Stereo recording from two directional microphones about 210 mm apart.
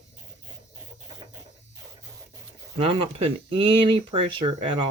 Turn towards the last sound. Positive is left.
turn(degrees=-25)  # may be behind; listen again after turning